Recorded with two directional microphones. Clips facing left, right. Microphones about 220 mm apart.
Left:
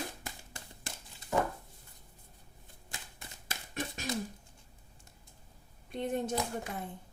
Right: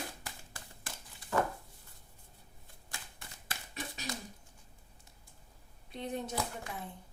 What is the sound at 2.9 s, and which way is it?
Typewriter, 20° left (ahead or behind).